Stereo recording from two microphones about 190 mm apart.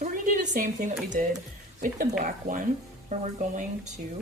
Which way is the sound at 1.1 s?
40° right (ahead or behind).